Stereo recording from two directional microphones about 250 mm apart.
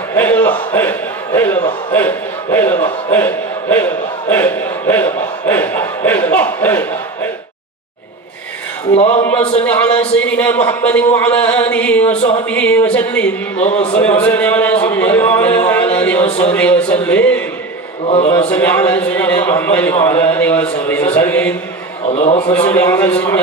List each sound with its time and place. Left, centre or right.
0.1 s a sound: centre
1.9 s a man's voice: centre
8.9 s a man's voice: left
9.2 s speech: centre
18.0 s a man's voice: left
18.3 s a man's voice: centre
22.1 s a man's voice: left
22.5 s a man's voice: centre